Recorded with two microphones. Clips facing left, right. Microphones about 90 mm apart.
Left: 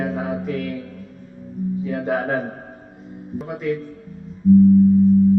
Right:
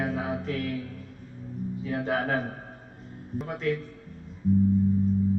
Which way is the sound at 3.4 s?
5° left (ahead or behind).